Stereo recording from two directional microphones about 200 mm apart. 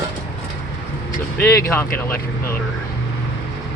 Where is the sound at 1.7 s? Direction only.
10° left (ahead or behind).